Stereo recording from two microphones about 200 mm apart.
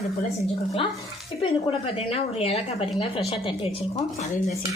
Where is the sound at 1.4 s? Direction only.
25° left (ahead or behind).